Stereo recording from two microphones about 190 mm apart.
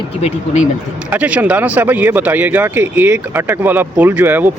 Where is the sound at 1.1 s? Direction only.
5° right (ahead or behind).